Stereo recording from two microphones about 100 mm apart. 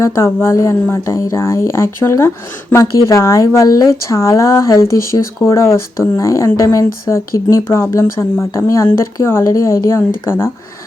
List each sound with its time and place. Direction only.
0.4 s a woman's voice: 30° left (ahead or behind)